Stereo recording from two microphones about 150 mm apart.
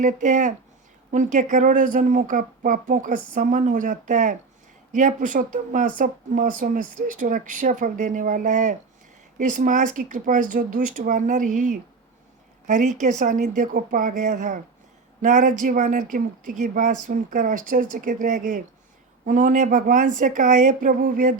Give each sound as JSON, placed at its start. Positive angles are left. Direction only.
{"t": 0.0, "sound": "speech", "side_deg": -55}